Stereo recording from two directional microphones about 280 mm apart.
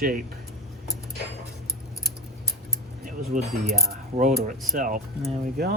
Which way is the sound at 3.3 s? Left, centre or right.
Right.